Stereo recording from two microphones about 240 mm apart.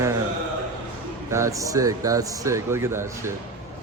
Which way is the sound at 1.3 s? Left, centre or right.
Centre.